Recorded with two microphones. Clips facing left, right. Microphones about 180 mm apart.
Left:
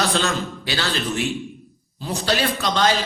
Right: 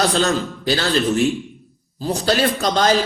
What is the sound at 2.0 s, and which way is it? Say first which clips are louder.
Speech: right 4 dB; 40° right (ahead or behind).